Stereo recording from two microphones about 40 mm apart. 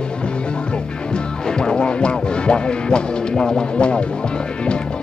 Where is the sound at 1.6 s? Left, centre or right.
Left.